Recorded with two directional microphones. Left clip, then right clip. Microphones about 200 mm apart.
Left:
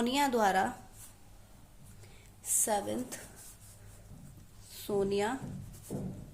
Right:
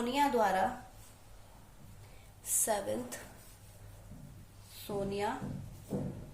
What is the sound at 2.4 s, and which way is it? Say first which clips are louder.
Speech: left 2 dB; 40° left (ahead or behind).